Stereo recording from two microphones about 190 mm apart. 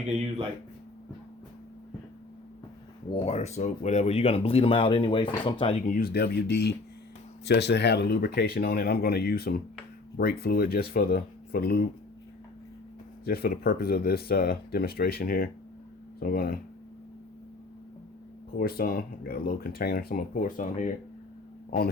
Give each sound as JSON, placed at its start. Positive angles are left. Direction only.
{"t": 3.2, "sound": "speech", "side_deg": 35}
{"t": 5.8, "sound": "speech", "side_deg": 50}
{"t": 13.2, "sound": "speech", "side_deg": 55}
{"t": 18.5, "sound": "speech", "side_deg": 55}